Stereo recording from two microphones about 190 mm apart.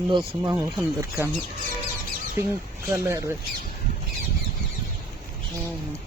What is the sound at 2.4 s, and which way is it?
Speech, 15° right (ahead or behind).